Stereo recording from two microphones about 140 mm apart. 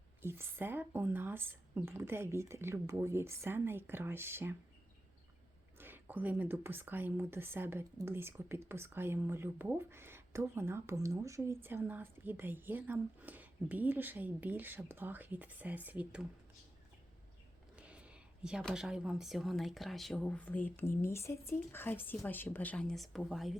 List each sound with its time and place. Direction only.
0.2 s speech: 15° right (ahead or behind)
5.7 s speech: 15° right (ahead or behind)
17.7 s a sound: 10° right (ahead or behind)
18.6 s speech: 5° right (ahead or behind)